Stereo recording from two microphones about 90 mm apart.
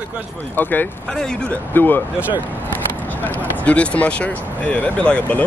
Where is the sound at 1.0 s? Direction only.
5° left (ahead or behind).